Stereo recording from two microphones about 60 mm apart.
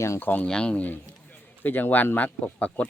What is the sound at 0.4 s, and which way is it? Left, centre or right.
Speech, centre.